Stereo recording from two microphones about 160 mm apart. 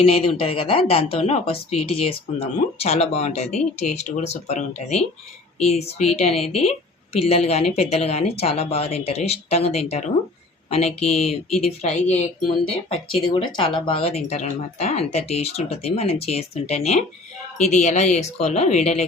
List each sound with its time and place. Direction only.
0.1 s speech: 35° left (ahead or behind)